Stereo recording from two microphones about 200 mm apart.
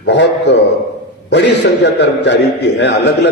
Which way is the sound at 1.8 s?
60° left (ahead or behind).